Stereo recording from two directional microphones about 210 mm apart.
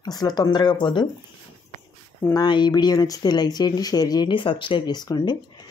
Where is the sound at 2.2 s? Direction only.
15° left (ahead or behind).